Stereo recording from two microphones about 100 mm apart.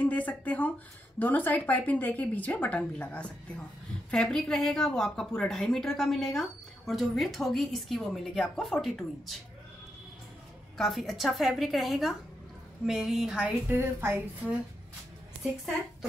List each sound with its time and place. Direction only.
0.0 s a woman's voice: 15° left (ahead or behind); by 9.4 s centre (ahead or behind)
10.8 s a woman's voice: centre (ahead or behind)
13.7 s a woman's voice: 25° right (ahead or behind)